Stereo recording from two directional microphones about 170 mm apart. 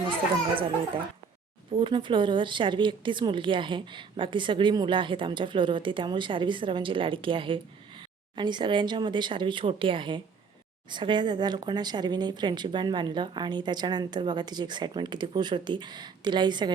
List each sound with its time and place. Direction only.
1.7 s a woman's voice: 30° right (ahead or behind)